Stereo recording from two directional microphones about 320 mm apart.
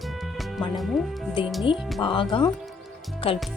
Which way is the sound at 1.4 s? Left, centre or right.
Centre.